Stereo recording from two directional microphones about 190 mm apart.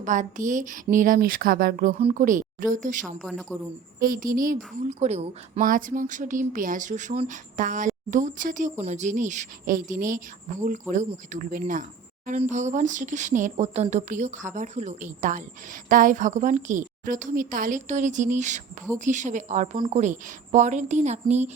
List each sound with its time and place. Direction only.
0.0 s a woman's voice: 40° right (ahead or behind)
2.0 s speech: 30° right (ahead or behind)
2.2 s a woman's voice: 45° right (ahead or behind)
3.2 s a woman's voice: centre (ahead or behind)
4.0 s a woman's voice: 45° right (ahead or behind)